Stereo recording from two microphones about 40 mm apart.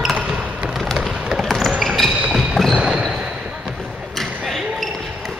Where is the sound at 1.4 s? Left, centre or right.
Centre.